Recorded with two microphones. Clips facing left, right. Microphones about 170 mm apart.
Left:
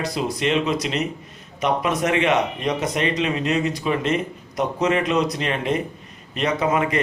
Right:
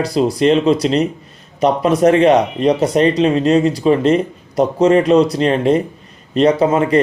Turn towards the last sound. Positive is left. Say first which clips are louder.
# right 8 dB
turn(degrees=-30)  # may be behind; listen again after turning